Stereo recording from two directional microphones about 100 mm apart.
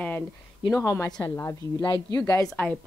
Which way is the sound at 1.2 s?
25° left (ahead or behind).